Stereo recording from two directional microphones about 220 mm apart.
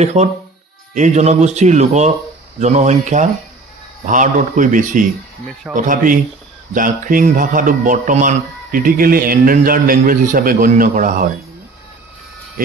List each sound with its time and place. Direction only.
0.0 s a man's voice: 30° right (ahead or behind)